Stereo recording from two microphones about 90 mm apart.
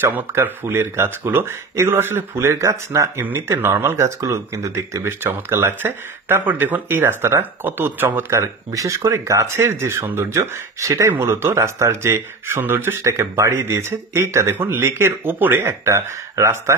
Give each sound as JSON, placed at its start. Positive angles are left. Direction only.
{"t": 0.0, "sound": "speech", "side_deg": -25}
{"t": 8.3, "sound": "speech", "side_deg": -35}